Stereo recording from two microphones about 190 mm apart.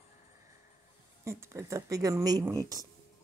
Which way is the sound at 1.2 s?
15° right (ahead or behind).